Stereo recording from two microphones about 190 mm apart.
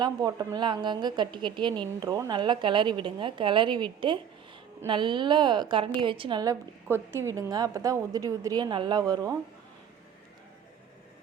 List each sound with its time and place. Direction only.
0.0 s a woman's voice: 20° right (ahead or behind)